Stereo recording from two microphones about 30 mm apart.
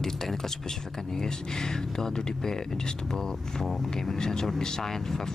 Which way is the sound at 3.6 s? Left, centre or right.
Centre.